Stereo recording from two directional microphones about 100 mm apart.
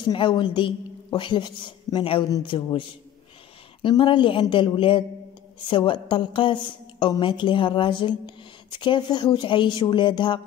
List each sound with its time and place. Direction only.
0.0 s a woman's voice: 55° left (ahead or behind)